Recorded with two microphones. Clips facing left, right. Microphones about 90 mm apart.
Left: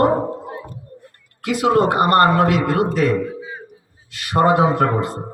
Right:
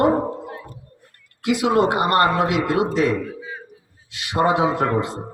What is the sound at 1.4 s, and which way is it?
A man's voice, 40° left (ahead or behind).